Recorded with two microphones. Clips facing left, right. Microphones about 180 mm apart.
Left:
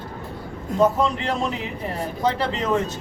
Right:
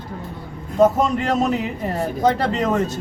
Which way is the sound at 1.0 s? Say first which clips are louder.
Right 4 dB; 45° right (ahead or behind).